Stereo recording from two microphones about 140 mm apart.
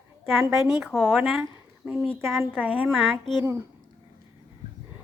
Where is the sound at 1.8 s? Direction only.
15° right (ahead or behind).